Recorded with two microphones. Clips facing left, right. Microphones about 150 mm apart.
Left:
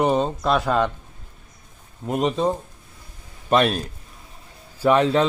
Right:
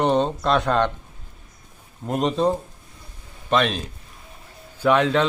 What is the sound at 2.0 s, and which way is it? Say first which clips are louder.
A man's voice: even; centre (ahead or behind).